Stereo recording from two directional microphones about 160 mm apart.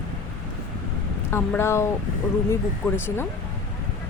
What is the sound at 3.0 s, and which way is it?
Speech, 15° left (ahead or behind).